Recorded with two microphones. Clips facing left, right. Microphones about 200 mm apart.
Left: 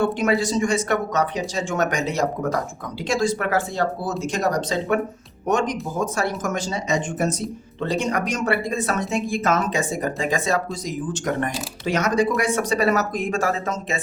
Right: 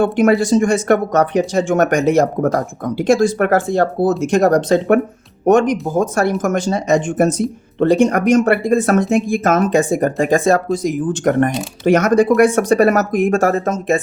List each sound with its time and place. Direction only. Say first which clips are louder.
0.0 s speech: right 7 dB; 55° right (ahead or behind)